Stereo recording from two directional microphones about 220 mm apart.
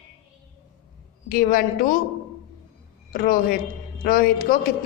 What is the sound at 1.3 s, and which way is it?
Speech, 40° left (ahead or behind).